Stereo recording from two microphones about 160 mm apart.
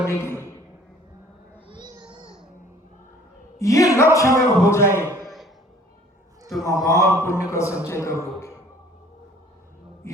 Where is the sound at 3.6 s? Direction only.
20° left (ahead or behind).